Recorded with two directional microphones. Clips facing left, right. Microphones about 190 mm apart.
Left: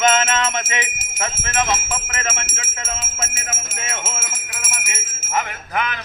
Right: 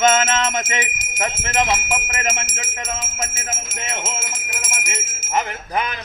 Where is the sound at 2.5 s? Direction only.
15° right (ahead or behind).